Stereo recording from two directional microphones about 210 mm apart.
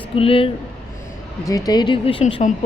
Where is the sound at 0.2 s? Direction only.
25° left (ahead or behind).